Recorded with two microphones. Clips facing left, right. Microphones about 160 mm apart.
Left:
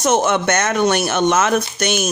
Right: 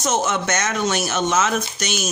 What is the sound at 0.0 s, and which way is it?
Speech, 60° left (ahead or behind).